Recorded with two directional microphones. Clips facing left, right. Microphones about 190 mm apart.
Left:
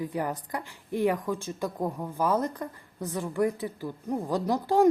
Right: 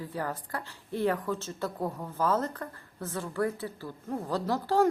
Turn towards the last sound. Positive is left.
turn(degrees=15)  # may be behind; listen again after turning